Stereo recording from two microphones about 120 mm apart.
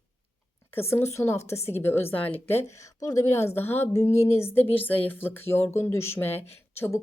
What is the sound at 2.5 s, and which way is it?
A woman's voice, 25° left (ahead or behind).